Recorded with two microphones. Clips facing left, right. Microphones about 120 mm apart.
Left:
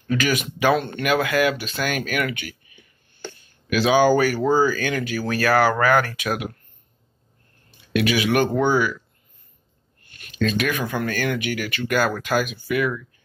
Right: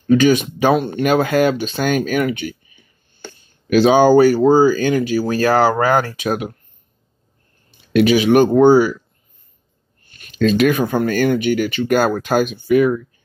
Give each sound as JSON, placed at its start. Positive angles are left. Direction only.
{"t": 0.1, "sound": "speech", "side_deg": -25}
{"t": 0.7, "sound": "speech", "side_deg": -15}
{"t": 1.0, "sound": "speech", "side_deg": -35}
{"t": 3.7, "sound": "speech", "side_deg": -30}
{"t": 7.9, "sound": "speech", "side_deg": -30}
{"t": 10.4, "sound": "speech", "side_deg": -35}